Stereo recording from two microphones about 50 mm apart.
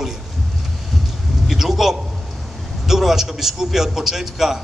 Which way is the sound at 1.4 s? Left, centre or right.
Centre.